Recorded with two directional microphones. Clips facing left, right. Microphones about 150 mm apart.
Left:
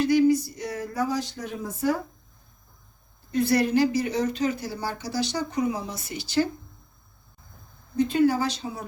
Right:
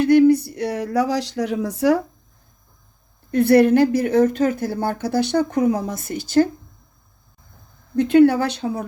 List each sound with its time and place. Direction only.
0.0 s a sound: 60° right (ahead or behind); by 2.0 s 80° right
3.3 s speech: 60° right (ahead or behind)
7.9 s speech: 65° right (ahead or behind)